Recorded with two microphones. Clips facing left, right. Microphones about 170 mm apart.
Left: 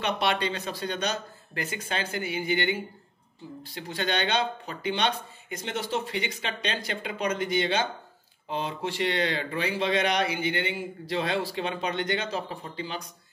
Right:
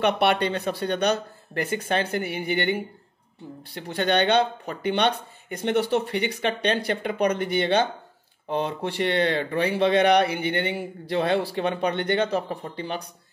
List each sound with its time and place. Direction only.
0.0 s speech: 60° right (ahead or behind)